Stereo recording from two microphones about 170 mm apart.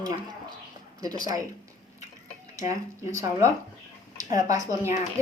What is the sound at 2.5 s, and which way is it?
A woman's voice, 20° right (ahead or behind).